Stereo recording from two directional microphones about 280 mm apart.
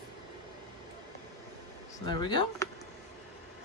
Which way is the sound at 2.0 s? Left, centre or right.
Centre.